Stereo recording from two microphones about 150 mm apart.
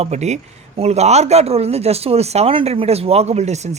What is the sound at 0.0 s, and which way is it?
A man's voice, 50° right (ahead or behind).